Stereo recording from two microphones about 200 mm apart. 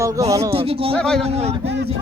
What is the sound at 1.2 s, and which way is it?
Speech, 30° right (ahead or behind).